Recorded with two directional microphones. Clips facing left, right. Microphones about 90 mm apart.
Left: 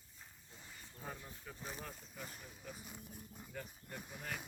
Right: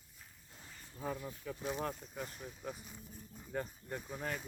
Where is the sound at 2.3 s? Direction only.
45° right (ahead or behind).